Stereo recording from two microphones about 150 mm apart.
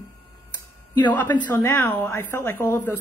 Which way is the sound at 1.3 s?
20° left (ahead or behind).